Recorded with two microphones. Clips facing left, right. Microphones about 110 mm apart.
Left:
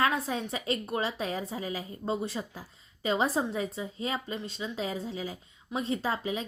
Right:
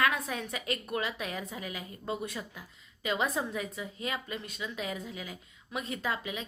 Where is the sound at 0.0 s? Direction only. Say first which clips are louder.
Left 2 dB; 30° left (ahead or behind).